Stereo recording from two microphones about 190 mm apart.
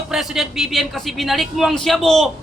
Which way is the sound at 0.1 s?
Centre (ahead or behind).